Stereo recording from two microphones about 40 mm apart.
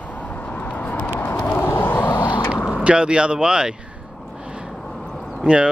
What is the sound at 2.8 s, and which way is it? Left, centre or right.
Speech, right.